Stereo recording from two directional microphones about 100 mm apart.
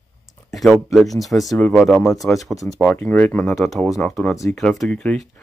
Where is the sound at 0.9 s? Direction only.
Centre (ahead or behind).